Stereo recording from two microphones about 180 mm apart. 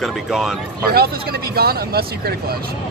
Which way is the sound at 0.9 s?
60° right (ahead or behind).